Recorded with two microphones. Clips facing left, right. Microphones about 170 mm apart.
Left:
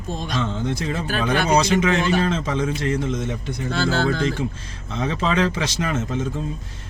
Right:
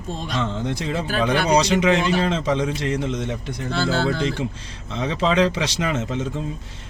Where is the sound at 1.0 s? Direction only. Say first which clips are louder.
Right 3 dB; 15° right (ahead or behind).